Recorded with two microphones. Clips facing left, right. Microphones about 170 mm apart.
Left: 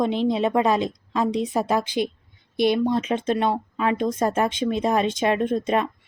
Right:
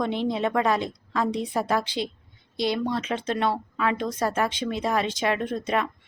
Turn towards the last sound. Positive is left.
turn(degrees=25)  # may be behind; listen again after turning